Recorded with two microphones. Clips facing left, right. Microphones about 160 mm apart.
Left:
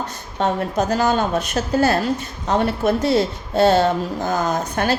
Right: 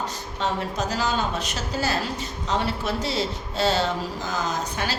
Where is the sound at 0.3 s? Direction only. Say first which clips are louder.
Left 7 dB; 55° left (ahead or behind).